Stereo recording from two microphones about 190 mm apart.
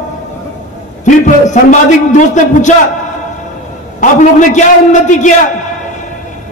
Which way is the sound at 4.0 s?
40° left (ahead or behind).